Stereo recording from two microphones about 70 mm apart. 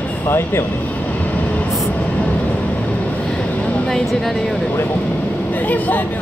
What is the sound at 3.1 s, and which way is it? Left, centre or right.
Vehicle, centre.